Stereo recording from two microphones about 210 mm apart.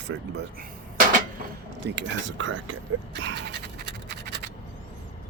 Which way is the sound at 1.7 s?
60° right (ahead or behind).